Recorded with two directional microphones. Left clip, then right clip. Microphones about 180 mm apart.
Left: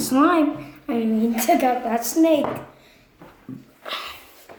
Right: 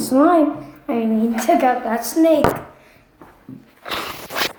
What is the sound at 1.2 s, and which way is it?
A woman's voice, 15° left (ahead or behind).